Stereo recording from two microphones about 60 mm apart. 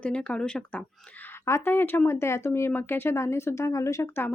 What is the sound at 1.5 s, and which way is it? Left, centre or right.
Speech, left.